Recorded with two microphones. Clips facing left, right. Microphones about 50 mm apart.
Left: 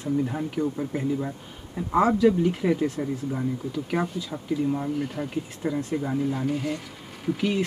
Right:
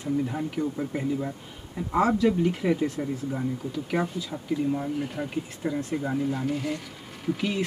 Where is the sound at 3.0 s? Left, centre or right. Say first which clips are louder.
Left 1 dB; centre.